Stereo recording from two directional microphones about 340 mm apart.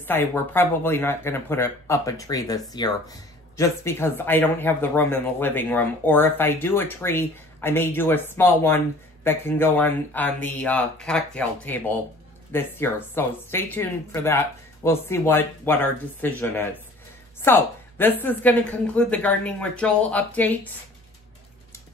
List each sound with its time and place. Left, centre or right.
0.0 s a woman's voice: centre